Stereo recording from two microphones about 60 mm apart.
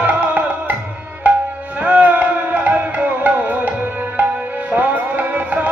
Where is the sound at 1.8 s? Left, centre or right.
Right.